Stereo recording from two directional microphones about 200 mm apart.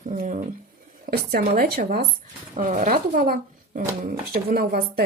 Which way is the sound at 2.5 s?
40° right (ahead or behind).